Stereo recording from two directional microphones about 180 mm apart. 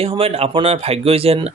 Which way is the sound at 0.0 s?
35° right (ahead or behind).